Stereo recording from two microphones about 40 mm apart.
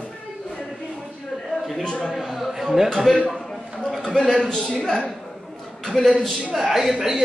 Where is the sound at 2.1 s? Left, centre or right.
Centre.